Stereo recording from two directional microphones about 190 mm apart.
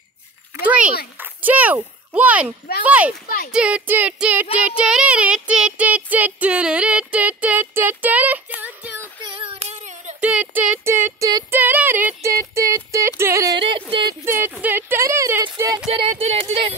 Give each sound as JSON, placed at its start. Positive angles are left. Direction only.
{"t": 0.7, "sound": "a sound", "side_deg": -5}
{"t": 2.1, "sound": "female singing", "side_deg": -5}
{"t": 9.2, "sound": "child singing", "side_deg": -30}
{"t": 10.2, "sound": "female singing", "side_deg": -5}
{"t": 13.6, "sound": "speech", "side_deg": -25}
{"t": 14.2, "sound": "female singing", "side_deg": -10}
{"t": 16.1, "sound": "speech", "side_deg": -35}